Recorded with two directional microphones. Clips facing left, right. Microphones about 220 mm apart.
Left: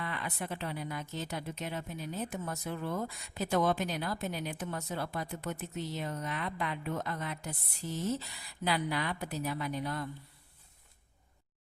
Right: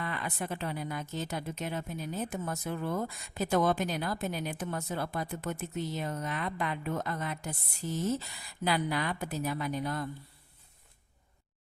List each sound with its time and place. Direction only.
0.0 s speech: 45° right (ahead or behind)